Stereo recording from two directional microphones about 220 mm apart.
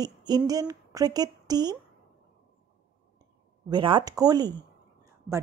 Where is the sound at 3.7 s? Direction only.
20° right (ahead or behind).